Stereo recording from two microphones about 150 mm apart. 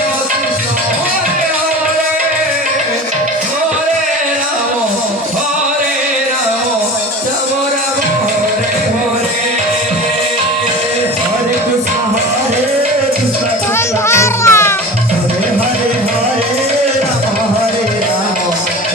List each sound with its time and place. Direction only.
14.1 s music: 15° left (ahead or behind)